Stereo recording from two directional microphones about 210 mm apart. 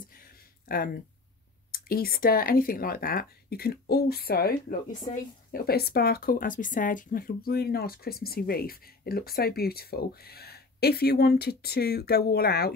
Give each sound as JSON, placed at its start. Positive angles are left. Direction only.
{"t": 0.7, "sound": "speech", "side_deg": 45}